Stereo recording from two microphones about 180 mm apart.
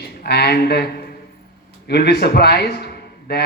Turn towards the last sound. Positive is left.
turn(degrees=65)  # may be behind; listen again after turning